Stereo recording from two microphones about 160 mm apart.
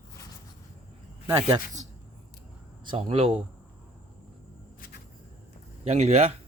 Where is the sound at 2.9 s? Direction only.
35° right (ahead or behind).